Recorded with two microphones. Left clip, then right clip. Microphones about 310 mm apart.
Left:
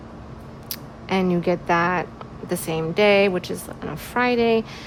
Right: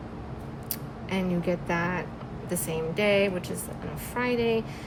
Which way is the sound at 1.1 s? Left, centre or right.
Left.